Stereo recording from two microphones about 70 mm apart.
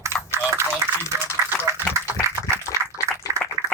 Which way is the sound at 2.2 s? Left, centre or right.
Right.